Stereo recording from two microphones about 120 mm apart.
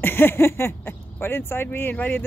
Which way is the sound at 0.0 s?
20° left (ahead or behind).